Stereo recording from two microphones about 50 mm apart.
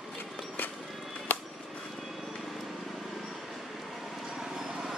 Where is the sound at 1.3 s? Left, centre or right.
Left.